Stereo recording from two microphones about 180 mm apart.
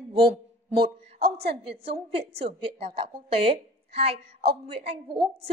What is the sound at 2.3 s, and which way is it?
A woman's voice, 30° right (ahead or behind).